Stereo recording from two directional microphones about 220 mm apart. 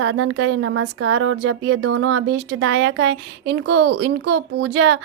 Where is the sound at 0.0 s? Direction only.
75° right (ahead or behind).